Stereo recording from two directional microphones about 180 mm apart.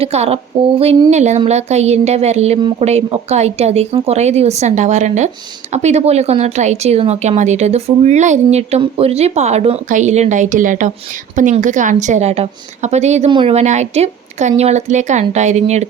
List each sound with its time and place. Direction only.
0.0 s speech: 35° right (ahead or behind)